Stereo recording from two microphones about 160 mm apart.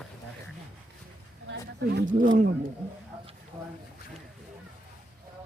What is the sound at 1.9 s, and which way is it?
Speech, 75° right (ahead or behind).